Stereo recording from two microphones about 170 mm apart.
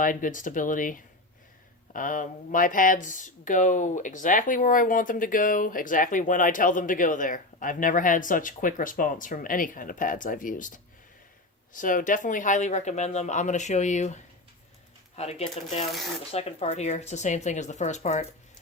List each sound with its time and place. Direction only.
0.0 s speech: 50° left (ahead or behind)
11.7 s speech: 50° left (ahead or behind)